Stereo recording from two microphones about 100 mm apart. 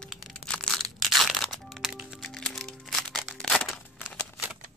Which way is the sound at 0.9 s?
Centre (ahead or behind).